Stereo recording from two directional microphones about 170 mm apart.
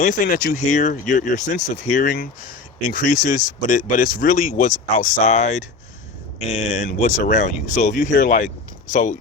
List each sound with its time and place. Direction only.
0.0 s speech: 55° left (ahead or behind)